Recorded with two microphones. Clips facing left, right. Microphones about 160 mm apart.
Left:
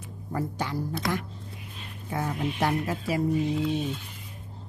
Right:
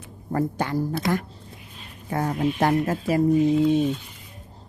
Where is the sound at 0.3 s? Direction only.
55° right (ahead or behind).